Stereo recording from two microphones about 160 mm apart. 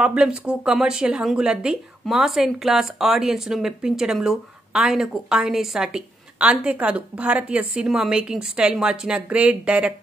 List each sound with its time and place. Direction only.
0.0 s speech: 5° right (ahead or behind)